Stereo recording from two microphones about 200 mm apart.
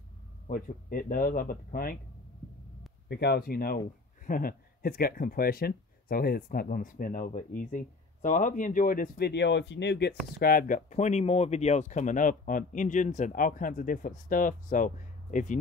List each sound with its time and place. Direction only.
0.5 s speech: 45° left (ahead or behind)
3.1 s speech: 55° left (ahead or behind); by 15.6 s 40° left (ahead or behind)